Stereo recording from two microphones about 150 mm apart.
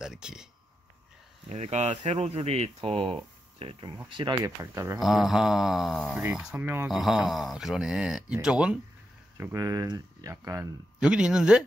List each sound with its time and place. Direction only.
0.0 s a sound: 5° right (ahead or behind)
1.5 s speech: 45° right (ahead or behind)
1.9 s speech: 35° right (ahead or behind)
4.6 s speech: 15° right (ahead or behind)
5.0 s speech: centre (ahead or behind)
6.9 s speech: centre (ahead or behind)
9.4 s speech: 20° right (ahead or behind)
11.0 s speech: 5° right (ahead or behind)